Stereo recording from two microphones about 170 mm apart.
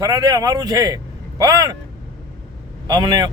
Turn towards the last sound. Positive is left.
turn(degrees=-20)  # may be behind; listen again after turning